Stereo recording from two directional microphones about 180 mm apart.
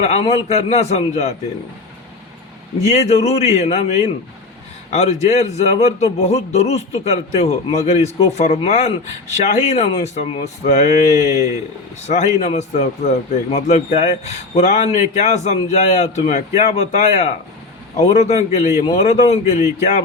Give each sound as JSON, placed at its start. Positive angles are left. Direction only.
{"t": 0.0, "sound": "a man's voice", "side_deg": 40}
{"t": 2.8, "sound": "a man's voice", "side_deg": 40}
{"t": 12.0, "sound": "a man's voice", "side_deg": 40}